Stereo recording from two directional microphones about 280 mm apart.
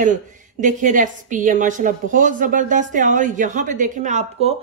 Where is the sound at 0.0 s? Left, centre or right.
Right.